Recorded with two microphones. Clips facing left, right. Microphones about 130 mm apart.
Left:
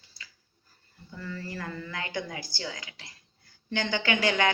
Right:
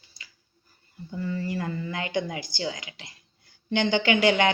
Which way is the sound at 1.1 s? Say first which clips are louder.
Right 8 dB; 20° right (ahead or behind).